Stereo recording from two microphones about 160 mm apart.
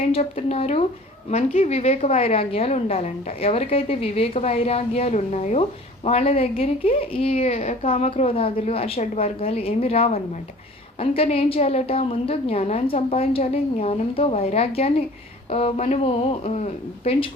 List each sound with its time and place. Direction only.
0.0 s a woman's voice: 35° left (ahead or behind)